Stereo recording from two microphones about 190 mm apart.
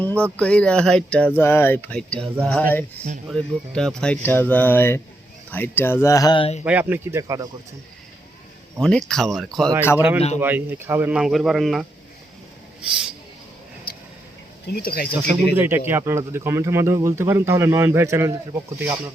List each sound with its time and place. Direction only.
0.2 s speech: 5° left (ahead or behind); by 6.6 s 25° left (ahead or behind)
6.7 s speech: 10° right (ahead or behind)
8.8 s speech: 5° left (ahead or behind)
10.2 s speech: 35° left (ahead or behind)
10.4 s speech: 10° right (ahead or behind)
13.9 s a sound: 55° left (ahead or behind)
14.7 s speech: 55° left (ahead or behind)
15.5 s speech: 10° right (ahead or behind)